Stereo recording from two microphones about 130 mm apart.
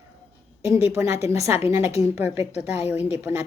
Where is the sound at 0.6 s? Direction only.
20° right (ahead or behind).